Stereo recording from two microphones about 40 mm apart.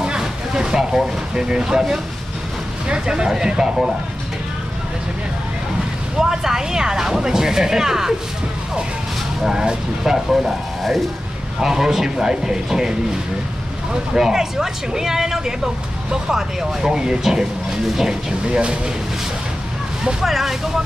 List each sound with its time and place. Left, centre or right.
0.0 s speech: centre
6.1 s speech: centre
9.4 s speech: centre
11.6 s speech: centre
14.1 s speech: centre
20.2 s speech: centre